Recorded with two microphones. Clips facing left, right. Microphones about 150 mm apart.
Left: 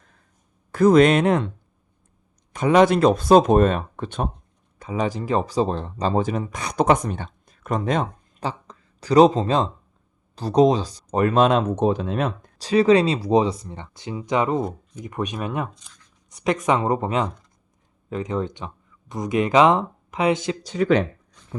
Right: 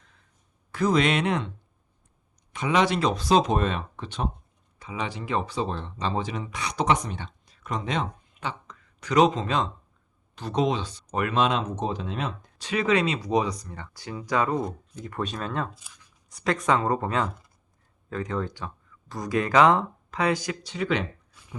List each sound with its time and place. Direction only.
0.7 s speech: 50° left (ahead or behind)
12.5 s speech: 35° left (ahead or behind); by 15.7 s 15° left (ahead or behind)
15.7 s a sound: 5° right (ahead or behind)
16.3 s speech: 20° left (ahead or behind)
20.7 s speech: 40° left (ahead or behind)